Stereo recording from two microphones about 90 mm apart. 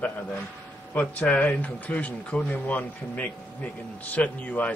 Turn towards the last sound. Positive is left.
turn(degrees=15)  # may be behind; listen again after turning